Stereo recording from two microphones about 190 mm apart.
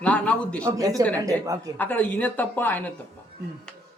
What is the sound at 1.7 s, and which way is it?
A man's voice, 10° left (ahead or behind).